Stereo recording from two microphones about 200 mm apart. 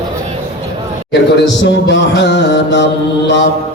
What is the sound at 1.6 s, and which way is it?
Music, 60° left (ahead or behind).